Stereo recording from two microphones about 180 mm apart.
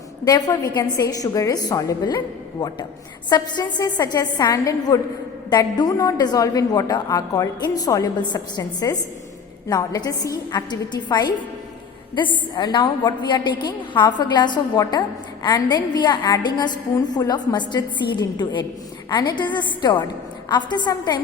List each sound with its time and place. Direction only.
0.3 s a woman's voice: 20° left (ahead or behind)